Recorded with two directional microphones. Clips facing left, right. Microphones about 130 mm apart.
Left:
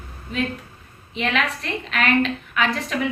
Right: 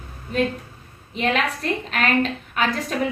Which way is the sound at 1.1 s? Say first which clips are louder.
Right 1 dB; 40° right (ahead or behind).